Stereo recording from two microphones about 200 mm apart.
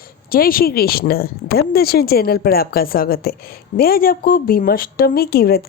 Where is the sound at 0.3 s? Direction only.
45° left (ahead or behind).